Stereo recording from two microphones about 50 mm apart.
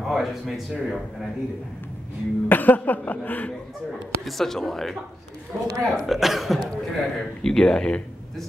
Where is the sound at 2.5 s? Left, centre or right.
Left.